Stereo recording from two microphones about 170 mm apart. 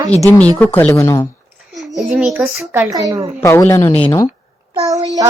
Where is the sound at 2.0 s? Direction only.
5° right (ahead or behind).